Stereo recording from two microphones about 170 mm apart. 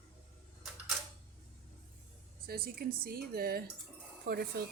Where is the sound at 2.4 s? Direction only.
60° right (ahead or behind).